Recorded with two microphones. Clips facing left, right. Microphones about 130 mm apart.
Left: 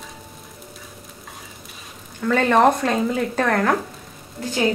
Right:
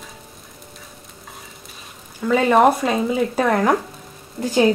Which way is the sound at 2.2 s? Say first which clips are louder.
Right 2 dB; 10° right (ahead or behind).